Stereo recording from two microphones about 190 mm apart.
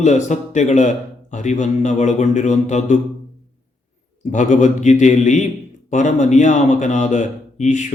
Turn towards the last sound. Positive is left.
turn(degrees=40)  # may be behind; listen again after turning